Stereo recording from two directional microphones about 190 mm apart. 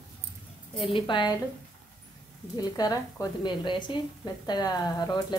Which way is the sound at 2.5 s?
20° left (ahead or behind).